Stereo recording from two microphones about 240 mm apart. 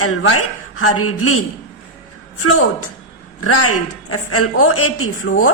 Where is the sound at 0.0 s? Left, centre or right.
Left.